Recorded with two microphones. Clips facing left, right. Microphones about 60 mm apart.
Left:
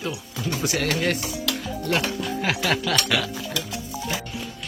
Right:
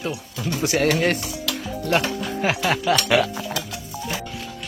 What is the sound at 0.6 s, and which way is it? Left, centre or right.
Speech, right.